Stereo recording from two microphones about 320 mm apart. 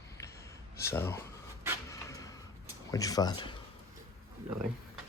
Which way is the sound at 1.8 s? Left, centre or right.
Centre.